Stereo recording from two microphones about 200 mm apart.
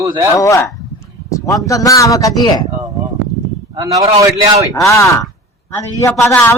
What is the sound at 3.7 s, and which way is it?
Speech, 15° right (ahead or behind).